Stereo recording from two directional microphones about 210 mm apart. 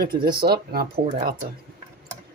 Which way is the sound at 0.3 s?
50° right (ahead or behind).